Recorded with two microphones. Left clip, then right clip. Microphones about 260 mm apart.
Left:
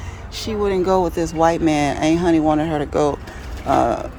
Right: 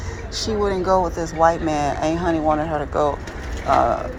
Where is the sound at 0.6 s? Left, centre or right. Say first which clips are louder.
Left 2 dB; left.